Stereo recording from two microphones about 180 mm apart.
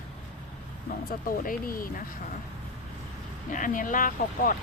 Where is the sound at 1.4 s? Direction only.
50° left (ahead or behind).